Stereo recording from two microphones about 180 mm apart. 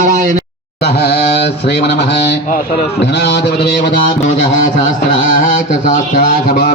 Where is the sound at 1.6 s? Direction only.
65° left (ahead or behind).